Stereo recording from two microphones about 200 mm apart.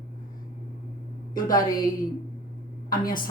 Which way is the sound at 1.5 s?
20° left (ahead or behind).